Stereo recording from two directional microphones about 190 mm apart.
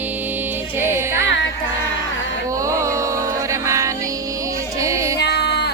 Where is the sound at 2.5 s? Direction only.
15° right (ahead or behind).